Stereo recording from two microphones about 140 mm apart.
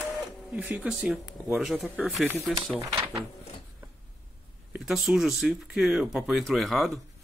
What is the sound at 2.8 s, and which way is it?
Speech, 20° right (ahead or behind).